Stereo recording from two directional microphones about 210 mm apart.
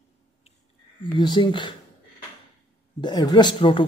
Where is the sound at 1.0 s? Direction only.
20° left (ahead or behind).